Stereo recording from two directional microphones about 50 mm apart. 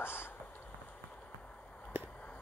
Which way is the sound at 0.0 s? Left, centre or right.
Left.